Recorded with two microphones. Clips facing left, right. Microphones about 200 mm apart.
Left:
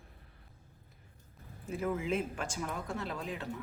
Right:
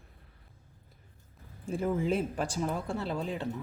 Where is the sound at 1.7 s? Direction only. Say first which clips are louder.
Right 4 dB; 30° right (ahead or behind).